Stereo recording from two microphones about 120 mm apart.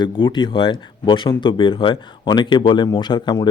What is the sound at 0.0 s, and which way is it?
Speech, 40° left (ahead or behind).